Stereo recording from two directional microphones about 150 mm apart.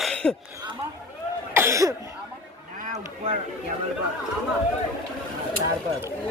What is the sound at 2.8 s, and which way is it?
Boat, 50° right (ahead or behind).